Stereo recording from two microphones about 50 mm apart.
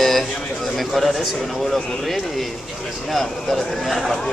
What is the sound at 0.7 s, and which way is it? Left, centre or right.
Speech, centre.